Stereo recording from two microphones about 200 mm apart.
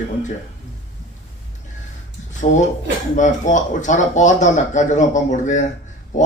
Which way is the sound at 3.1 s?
40° left (ahead or behind).